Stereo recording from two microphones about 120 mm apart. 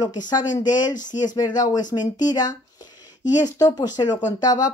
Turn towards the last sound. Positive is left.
turn(degrees=30)  # may be behind; listen again after turning